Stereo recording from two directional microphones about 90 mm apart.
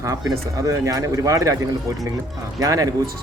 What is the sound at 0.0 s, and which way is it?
Speech, 35° right (ahead or behind).